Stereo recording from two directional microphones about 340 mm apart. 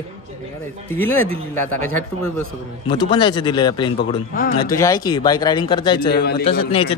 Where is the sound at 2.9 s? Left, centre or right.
Centre.